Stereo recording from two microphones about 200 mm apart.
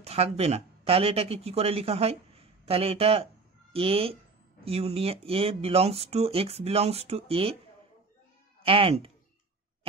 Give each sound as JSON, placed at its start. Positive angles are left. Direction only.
{"t": 0.0, "sound": "speech", "side_deg": -30}
{"t": 8.6, "sound": "speech", "side_deg": -30}